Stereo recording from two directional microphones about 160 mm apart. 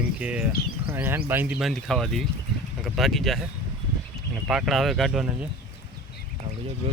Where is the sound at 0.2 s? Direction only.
10° right (ahead or behind).